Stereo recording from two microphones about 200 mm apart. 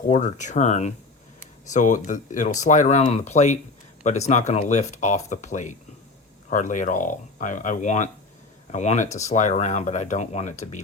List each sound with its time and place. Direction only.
0.1 s speech: 35° left (ahead or behind)